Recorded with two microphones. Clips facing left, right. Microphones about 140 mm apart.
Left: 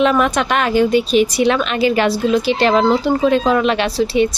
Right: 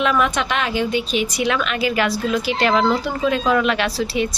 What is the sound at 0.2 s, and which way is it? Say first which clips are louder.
A woman's voice: left 4 dB; 45° left (ahead or behind).